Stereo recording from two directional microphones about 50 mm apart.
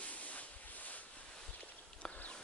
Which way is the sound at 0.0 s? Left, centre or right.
Left.